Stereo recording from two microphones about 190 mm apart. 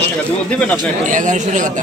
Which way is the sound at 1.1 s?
40° right (ahead or behind).